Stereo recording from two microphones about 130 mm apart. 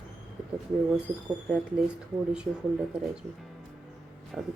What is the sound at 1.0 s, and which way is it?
Speech, 5° right (ahead or behind).